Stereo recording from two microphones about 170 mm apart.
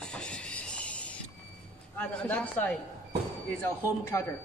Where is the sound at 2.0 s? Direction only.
5° left (ahead or behind).